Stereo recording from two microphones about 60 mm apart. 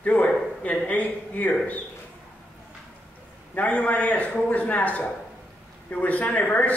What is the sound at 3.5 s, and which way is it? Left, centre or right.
A man's voice, left.